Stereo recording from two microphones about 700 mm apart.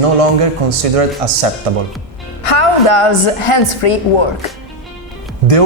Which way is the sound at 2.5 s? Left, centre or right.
Left.